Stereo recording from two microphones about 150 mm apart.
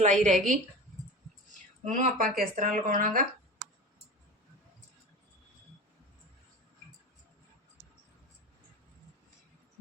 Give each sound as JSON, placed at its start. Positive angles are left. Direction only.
{"t": 0.0, "sound": "speech", "side_deg": -50}
{"t": 1.8, "sound": "speech", "side_deg": -55}